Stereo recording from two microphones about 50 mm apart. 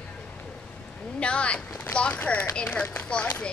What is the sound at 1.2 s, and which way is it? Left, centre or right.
A woman's voice, left.